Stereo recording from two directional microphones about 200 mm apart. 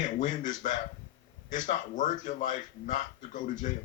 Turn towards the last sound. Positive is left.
turn(degrees=40)  # may be behind; listen again after turning